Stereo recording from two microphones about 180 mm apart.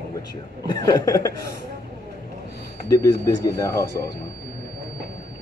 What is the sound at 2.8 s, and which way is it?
Speech, 15° left (ahead or behind).